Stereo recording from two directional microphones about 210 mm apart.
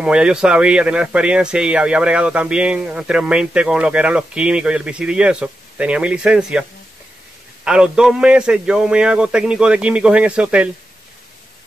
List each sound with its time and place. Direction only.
0.0 s speech: 5° right (ahead or behind)
7.6 s speech: 5° right (ahead or behind)